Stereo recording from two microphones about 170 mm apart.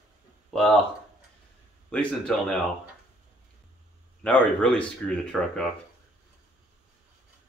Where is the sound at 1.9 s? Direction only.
5° left (ahead or behind).